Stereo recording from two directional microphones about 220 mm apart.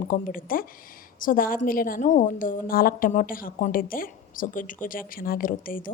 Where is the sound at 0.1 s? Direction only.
40° left (ahead or behind).